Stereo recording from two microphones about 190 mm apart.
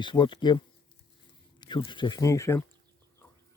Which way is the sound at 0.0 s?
25° left (ahead or behind).